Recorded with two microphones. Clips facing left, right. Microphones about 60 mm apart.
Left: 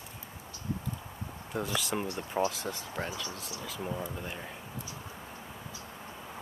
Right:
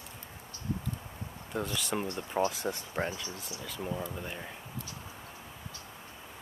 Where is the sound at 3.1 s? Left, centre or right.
Right.